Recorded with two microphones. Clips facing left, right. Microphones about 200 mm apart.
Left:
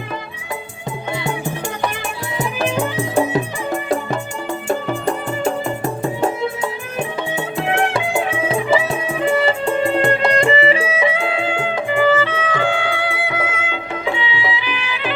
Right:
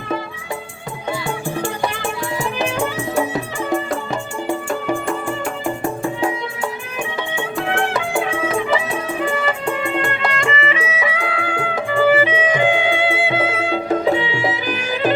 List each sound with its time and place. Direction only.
7.5 s music: 25° left (ahead or behind)
12.0 s music: 15° right (ahead or behind); by 15.1 s 45° right (ahead or behind)